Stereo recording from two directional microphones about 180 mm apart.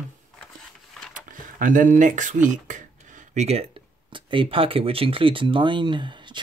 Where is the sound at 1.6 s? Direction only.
45° right (ahead or behind); by 6.4 s 25° right (ahead or behind).